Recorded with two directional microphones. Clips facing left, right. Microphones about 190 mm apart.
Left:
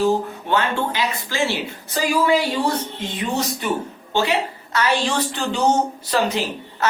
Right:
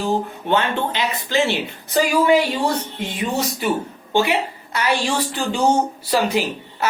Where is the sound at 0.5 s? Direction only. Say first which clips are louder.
Right 1 dB; 20° right (ahead or behind).